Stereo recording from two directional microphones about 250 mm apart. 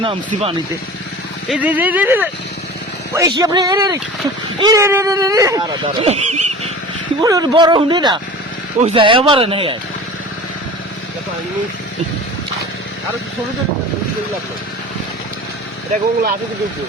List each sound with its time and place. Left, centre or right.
0.0 s speech: right
1.5 s speech: centre; by 6.5 s right
7.2 s speech: centre